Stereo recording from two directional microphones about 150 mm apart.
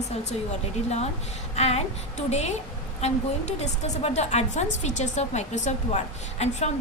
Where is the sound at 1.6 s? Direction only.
45° left (ahead or behind).